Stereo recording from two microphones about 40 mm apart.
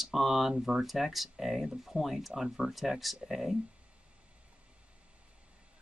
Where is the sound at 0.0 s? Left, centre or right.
Centre.